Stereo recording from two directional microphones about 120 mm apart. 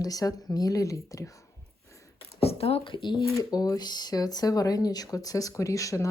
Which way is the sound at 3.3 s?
30° left (ahead or behind).